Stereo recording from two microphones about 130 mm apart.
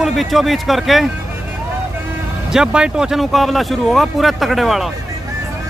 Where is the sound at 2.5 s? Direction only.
5° right (ahead or behind).